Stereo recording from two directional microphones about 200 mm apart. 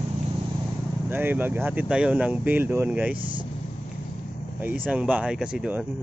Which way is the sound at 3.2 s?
25° right (ahead or behind).